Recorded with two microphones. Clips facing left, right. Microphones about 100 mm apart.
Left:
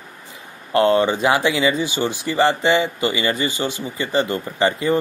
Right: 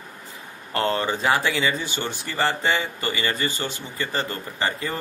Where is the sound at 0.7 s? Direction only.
15° left (ahead or behind).